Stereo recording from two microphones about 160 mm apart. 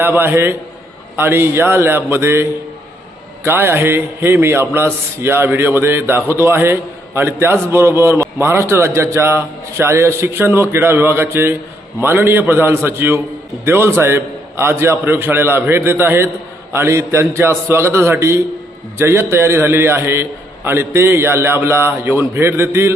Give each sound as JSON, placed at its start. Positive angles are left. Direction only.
{"t": 0.0, "sound": "a man's voice", "side_deg": -15}